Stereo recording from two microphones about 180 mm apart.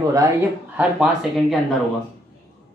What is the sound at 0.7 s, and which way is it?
Speech, 5° right (ahead or behind).